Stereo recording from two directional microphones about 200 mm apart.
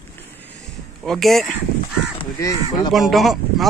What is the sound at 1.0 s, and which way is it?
Speech, centre (ahead or behind).